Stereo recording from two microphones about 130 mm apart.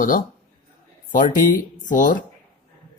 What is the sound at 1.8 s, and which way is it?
Speech, 90° left.